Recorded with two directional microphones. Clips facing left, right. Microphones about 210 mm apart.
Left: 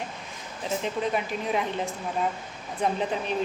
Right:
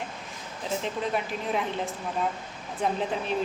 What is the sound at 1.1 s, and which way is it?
Speech, centre (ahead or behind).